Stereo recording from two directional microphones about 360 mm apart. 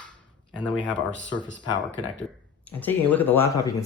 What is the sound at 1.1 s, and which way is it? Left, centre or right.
Speech, left.